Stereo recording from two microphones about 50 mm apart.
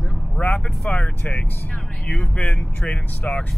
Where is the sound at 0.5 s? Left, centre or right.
Left.